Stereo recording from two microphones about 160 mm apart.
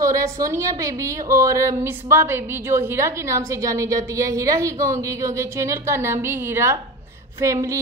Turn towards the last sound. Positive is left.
turn(degrees=-20)  # may be behind; listen again after turning